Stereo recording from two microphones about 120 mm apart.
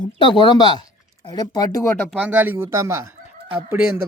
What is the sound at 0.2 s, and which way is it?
Speech, 40° left (ahead or behind).